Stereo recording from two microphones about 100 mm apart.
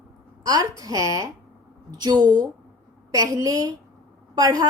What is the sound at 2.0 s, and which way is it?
A woman's voice, 45° right (ahead or behind).